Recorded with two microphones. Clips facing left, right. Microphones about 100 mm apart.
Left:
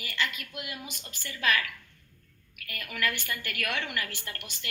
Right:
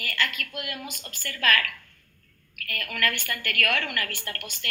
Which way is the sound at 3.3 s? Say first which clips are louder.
Right 6 dB; 65° right (ahead or behind).